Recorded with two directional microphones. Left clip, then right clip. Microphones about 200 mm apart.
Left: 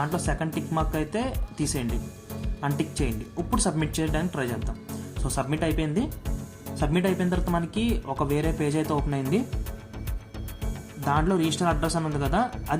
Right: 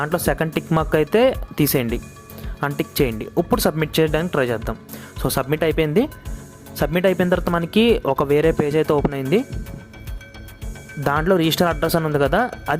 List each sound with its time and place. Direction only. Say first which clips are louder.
0.0 s speech: right 8 dB; 50° right (ahead or behind)
11.0 s speech: right 7 dB; 50° right (ahead or behind)